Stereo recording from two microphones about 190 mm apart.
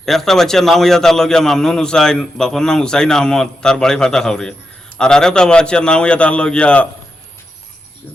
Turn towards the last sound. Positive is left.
turn(degrees=5)  # may be behind; listen again after turning